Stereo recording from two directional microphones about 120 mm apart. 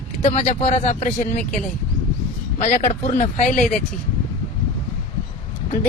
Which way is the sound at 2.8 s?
70° left (ahead or behind).